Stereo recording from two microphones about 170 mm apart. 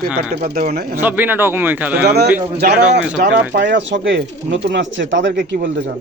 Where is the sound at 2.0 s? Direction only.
75° right (ahead or behind).